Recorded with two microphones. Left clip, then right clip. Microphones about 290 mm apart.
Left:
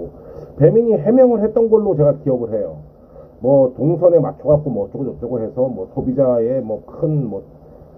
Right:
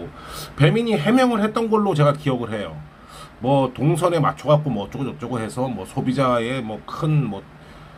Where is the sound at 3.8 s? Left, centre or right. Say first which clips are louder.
Left 6 dB; right.